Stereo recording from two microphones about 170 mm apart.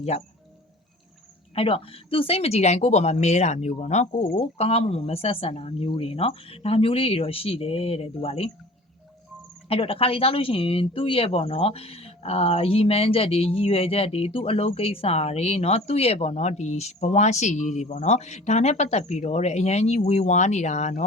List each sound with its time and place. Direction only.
0.1 s speech: 40° left (ahead or behind)
1.5 s speech: 35° left (ahead or behind)
9.6 s speech: 35° left (ahead or behind)